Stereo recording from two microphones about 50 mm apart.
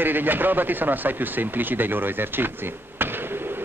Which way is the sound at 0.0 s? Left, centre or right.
Right.